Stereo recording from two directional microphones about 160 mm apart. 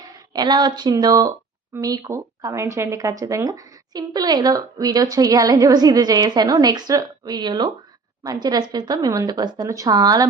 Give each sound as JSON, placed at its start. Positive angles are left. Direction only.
{"t": 0.3, "sound": "speech", "side_deg": -25}